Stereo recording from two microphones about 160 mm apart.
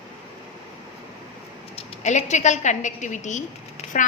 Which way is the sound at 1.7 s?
45° left (ahead or behind).